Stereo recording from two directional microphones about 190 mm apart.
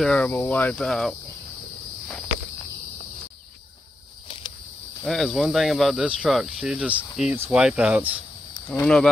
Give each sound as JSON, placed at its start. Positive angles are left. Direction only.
{"t": 0.0, "sound": "speech", "side_deg": 5}
{"t": 5.0, "sound": "speech", "side_deg": 0}
{"t": 8.6, "sound": "speech", "side_deg": 5}